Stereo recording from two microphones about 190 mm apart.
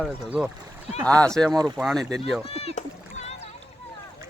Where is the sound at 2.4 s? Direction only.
30° left (ahead or behind).